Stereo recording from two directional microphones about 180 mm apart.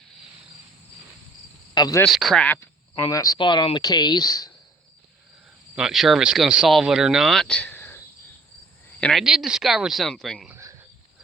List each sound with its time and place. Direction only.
1.7 s cricket: 20° left (ahead or behind)
2.0 s speech: centre (ahead or behind); by 4.5 s 20° left (ahead or behind)
5.7 s speech: centre (ahead or behind)
10.5 s a sound: 15° right (ahead or behind)